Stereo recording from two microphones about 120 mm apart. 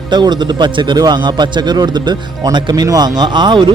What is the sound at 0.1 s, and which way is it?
A man's voice, 40° right (ahead or behind).